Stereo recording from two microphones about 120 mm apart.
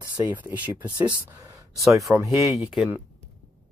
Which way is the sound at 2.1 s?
10° right (ahead or behind).